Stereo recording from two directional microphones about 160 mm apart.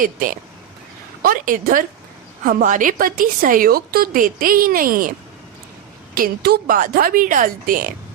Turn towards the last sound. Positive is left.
turn(degrees=-60)  # may be behind; listen again after turning